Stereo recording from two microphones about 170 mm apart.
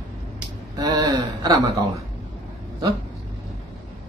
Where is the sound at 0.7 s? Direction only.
20° right (ahead or behind).